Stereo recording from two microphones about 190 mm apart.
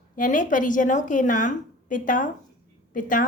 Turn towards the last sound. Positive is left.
turn(degrees=45)  # may be behind; listen again after turning